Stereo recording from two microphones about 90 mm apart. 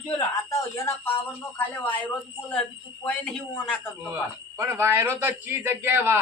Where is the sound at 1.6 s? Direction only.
20° left (ahead or behind).